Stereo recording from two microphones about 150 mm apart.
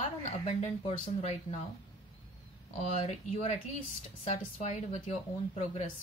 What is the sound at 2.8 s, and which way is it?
Speech, 45° left (ahead or behind).